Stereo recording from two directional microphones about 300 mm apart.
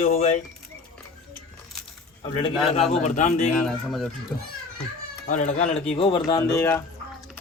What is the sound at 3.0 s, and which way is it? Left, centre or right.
Speech, left.